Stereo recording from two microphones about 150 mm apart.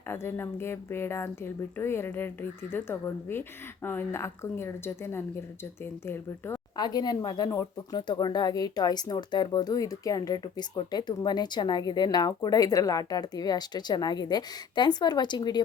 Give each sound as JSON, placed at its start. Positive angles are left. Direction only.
{"t": 0.1, "sound": "speech", "side_deg": 15}
{"t": 6.7, "sound": "speech", "side_deg": 30}